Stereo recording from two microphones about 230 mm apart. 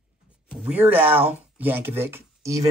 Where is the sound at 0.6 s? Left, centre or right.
Centre.